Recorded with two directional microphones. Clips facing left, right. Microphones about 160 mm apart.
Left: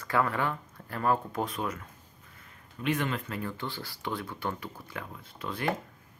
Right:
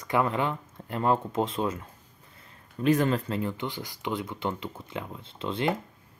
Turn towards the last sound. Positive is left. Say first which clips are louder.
# right 4 dB
turn(degrees=-25)  # may be behind; listen again after turning